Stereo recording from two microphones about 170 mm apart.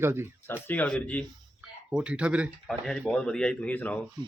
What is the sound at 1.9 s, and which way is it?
Speech, 5° right (ahead or behind).